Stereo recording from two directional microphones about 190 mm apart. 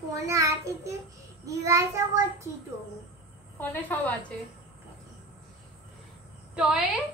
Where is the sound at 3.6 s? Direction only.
10° left (ahead or behind).